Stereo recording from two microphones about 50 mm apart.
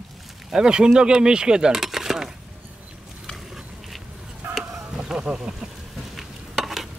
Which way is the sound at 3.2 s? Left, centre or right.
Centre.